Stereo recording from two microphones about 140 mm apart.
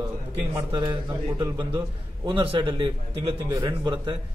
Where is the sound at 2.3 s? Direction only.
35° right (ahead or behind).